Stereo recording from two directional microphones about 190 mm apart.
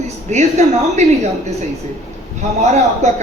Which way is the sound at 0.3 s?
40° right (ahead or behind).